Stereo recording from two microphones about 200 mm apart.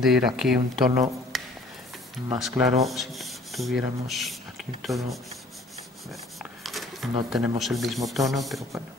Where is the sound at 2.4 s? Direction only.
Centre (ahead or behind).